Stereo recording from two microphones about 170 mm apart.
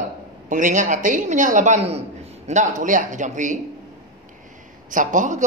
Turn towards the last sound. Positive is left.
turn(degrees=-50)  # may be behind; listen again after turning